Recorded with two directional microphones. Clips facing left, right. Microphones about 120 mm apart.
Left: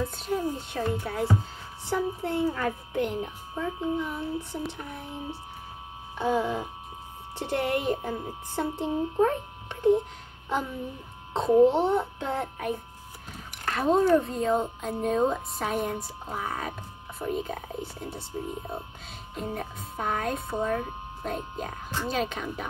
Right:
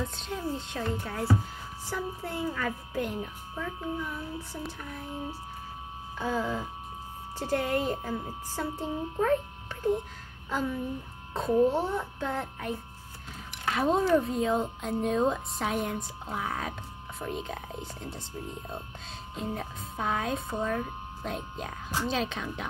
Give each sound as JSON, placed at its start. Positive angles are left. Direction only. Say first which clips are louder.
{"t": 0.0, "sound": "a woman's voice", "louder": "left 5 dB", "side_deg": 5}
{"t": 11.3, "sound": "a woman's voice", "louder": "left 5 dB", "side_deg": 25}
{"t": 13.7, "sound": "speech", "louder": "left 3 dB", "side_deg": 0}